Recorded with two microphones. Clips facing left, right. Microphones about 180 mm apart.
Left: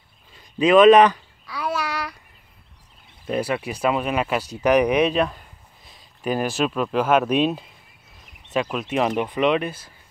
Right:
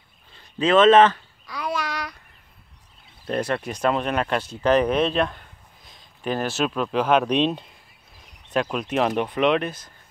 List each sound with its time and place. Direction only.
0.3 s speech: 15° left (ahead or behind)
1.4 s child singing: 5° left (ahead or behind)
3.3 s speech: 5° left (ahead or behind)
5.2 s a sound: 5° left (ahead or behind)
8.5 s speech: centre (ahead or behind)